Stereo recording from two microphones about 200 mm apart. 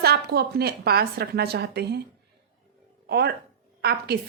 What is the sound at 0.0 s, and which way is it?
A woman's voice, 55° right (ahead or behind).